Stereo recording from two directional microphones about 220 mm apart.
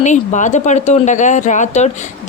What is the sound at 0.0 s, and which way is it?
Speech, 35° left (ahead or behind).